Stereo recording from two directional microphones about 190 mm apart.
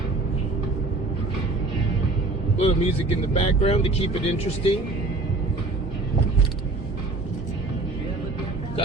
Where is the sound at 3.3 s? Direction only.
30° left (ahead or behind).